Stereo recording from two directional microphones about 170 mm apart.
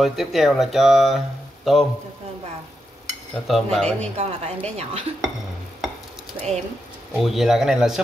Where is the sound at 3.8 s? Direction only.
40° right (ahead or behind).